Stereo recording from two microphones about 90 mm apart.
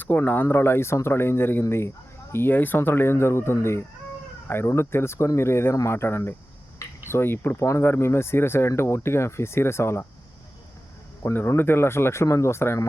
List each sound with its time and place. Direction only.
0.0 s speech: 20° left (ahead or behind)
11.2 s speech: 30° left (ahead or behind)